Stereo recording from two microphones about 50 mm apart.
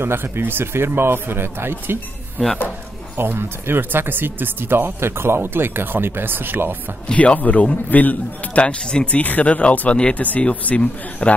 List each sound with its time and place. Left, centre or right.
0.0 s speech: right
2.4 s speech: centre
3.2 s speech: right
7.2 s a man's voice: left
8.6 s speech: left